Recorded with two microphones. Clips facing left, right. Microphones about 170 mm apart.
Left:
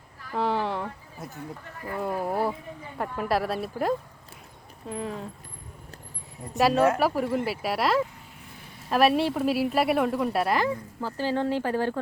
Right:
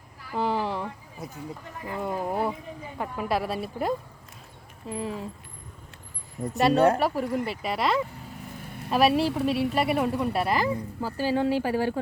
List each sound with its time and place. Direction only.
0.2 s a sound: 5° right (ahead or behind)
1.6 s speech: 15° right (ahead or behind)
2.0 s a woman's voice: centre (ahead or behind)
6.6 s a woman's voice: centre (ahead or behind)